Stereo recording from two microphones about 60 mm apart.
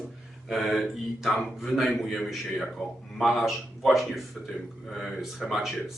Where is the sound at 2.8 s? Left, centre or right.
Centre.